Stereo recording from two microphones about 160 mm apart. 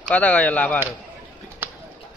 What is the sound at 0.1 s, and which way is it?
Speech, 10° left (ahead or behind).